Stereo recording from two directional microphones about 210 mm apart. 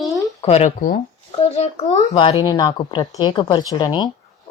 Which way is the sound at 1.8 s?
25° left (ahead or behind).